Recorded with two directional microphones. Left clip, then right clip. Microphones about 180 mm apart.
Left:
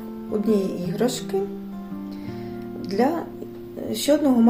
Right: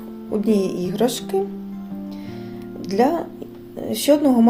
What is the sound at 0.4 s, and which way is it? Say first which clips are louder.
Speech: right 3 dB; 35° right (ahead or behind).